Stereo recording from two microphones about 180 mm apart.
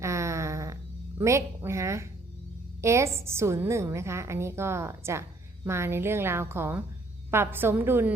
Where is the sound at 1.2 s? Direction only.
15° right (ahead or behind).